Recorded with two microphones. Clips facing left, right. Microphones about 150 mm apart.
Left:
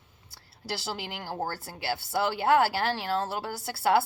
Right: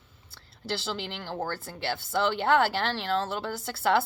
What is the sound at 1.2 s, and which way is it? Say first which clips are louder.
Speech: even; 40° left (ahead or behind).